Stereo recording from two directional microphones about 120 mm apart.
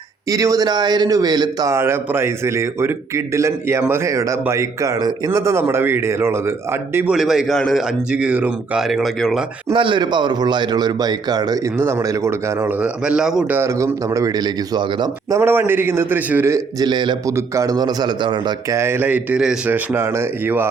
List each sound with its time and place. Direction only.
0.3 s a man's voice: 30° right (ahead or behind)
1.7 s a man's voice: 20° right (ahead or behind)
7.1 s a man's voice: 5° right (ahead or behind)
8.1 s a man's voice: 10° right (ahead or behind)
9.7 s a man's voice: 40° right (ahead or behind)
11.8 s a man's voice: 20° right (ahead or behind)
12.8 s a man's voice: 5° right (ahead or behind)
13.5 s a man's voice: 20° right (ahead or behind)
15.4 s a man's voice: 20° right (ahead or behind)
16.8 s a man's voice: 40° right (ahead or behind)
17.2 s a man's voice: 25° right (ahead or behind)
18.7 s a man's voice: 20° right (ahead or behind)